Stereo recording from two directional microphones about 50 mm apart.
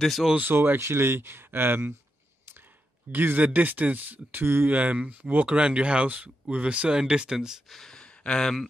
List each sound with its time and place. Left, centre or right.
0.0 s speech: centre
0.4 s speech: right
3.1 s speech: right
4.7 s speech: right
5.6 s speech: right
7.6 s speech: centre
7.9 s a sound: centre